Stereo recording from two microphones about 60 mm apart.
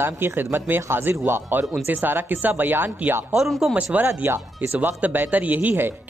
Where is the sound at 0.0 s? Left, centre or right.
Right.